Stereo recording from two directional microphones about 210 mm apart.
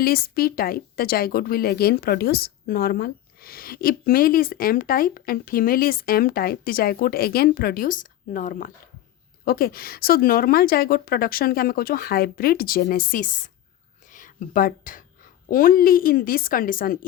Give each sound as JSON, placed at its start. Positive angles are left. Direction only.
{"t": 0.0, "sound": "a woman's voice", "side_deg": 45}